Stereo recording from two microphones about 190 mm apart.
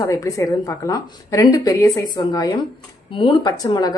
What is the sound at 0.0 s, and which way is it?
A woman's voice, 15° left (ahead or behind).